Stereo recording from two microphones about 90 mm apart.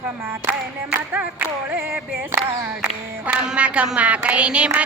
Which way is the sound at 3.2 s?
15° right (ahead or behind).